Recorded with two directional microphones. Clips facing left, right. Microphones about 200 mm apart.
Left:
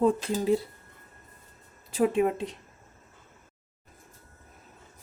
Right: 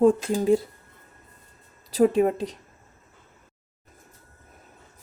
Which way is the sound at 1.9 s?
35° right (ahead or behind).